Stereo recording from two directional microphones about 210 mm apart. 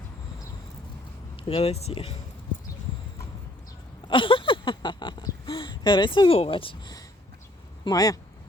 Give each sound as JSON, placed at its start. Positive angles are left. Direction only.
{"t": 1.5, "sound": "speech", "side_deg": 30}
{"t": 4.1, "sound": "speech", "side_deg": 25}